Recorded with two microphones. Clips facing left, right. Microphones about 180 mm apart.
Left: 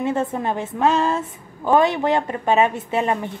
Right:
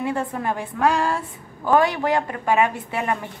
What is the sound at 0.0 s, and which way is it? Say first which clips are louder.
A woman's voice: left 3 dB; 20° left (ahead or behind).